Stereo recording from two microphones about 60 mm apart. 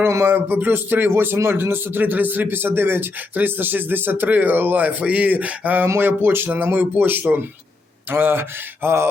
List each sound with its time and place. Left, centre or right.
0.3 s speech: right